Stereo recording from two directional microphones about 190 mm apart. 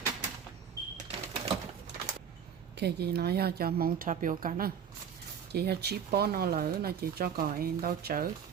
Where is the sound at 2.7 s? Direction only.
60° right (ahead or behind).